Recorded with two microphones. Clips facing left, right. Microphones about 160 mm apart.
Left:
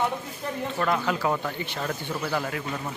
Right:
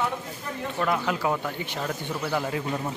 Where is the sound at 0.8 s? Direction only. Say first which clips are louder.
Even; 10° right (ahead or behind).